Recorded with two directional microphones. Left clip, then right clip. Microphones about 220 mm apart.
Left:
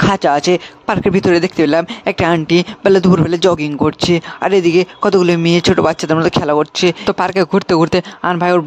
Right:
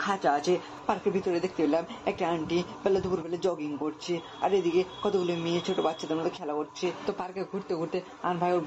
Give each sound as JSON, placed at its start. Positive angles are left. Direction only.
{"t": 0.0, "sound": "speech", "side_deg": 50}